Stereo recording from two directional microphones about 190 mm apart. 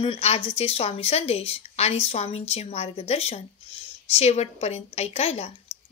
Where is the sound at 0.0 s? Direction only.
30° left (ahead or behind).